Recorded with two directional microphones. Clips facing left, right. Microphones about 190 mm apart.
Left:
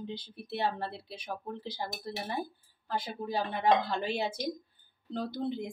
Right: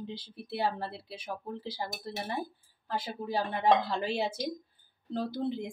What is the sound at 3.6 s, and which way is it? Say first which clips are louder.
A woman's voice: right 1 dB; 5° right (ahead or behind).